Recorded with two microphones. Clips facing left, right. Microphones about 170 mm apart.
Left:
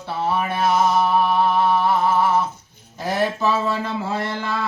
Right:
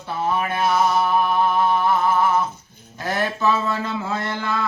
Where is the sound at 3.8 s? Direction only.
35° left (ahead or behind).